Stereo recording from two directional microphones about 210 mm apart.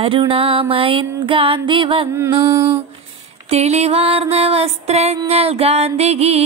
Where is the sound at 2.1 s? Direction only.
10° right (ahead or behind).